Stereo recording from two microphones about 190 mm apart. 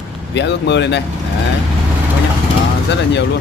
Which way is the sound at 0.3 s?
65° left (ahead or behind).